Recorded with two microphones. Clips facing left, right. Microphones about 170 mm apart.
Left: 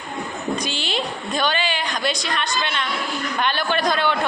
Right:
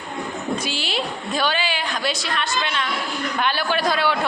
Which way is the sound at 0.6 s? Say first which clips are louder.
Even; 5° right (ahead or behind).